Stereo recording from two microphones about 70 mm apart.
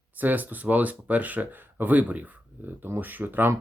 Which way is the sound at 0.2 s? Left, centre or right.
Right.